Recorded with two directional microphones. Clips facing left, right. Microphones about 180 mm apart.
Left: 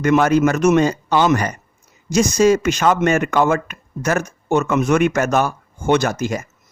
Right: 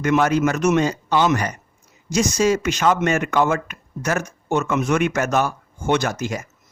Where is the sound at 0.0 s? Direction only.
50° left (ahead or behind).